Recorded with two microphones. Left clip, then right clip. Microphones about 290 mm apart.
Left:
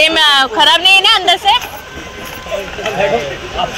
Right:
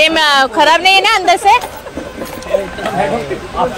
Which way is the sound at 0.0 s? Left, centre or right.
Centre.